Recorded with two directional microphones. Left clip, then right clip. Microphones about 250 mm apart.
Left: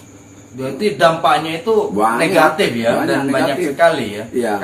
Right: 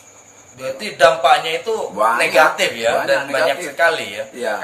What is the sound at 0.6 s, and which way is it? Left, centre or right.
A man's voice, right.